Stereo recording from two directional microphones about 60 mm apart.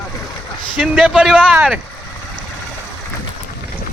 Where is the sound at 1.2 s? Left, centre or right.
Centre.